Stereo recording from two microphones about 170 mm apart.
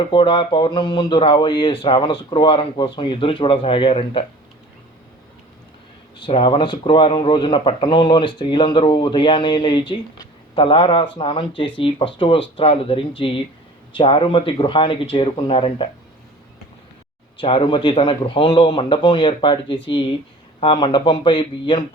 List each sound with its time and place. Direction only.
0.1 s speech: 30° left (ahead or behind)
6.1 s speech: 30° left (ahead or behind)
17.4 s speech: 30° left (ahead or behind)
20.6 s speech: 30° left (ahead or behind)